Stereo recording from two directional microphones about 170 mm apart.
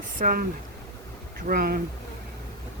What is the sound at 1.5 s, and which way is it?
Speech, 60° right (ahead or behind).